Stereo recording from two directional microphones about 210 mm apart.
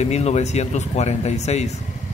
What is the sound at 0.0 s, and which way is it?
A man's voice, 30° left (ahead or behind).